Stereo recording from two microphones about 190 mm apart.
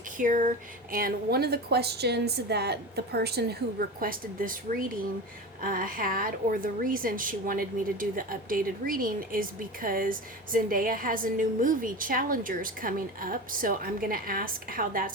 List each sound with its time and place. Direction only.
0.2 s a woman's voice: 45° right (ahead or behind)